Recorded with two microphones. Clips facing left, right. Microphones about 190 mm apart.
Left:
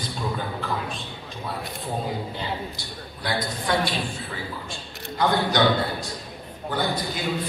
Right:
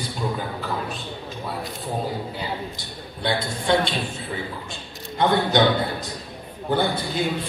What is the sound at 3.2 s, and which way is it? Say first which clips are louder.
Speech: right 4 dB; 25° right (ahead or behind).